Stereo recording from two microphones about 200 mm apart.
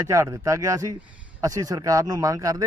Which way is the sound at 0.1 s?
15° right (ahead or behind).